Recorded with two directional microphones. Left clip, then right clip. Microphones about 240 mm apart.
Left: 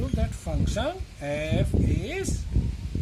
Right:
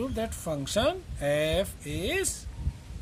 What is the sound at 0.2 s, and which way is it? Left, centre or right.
Speech, right.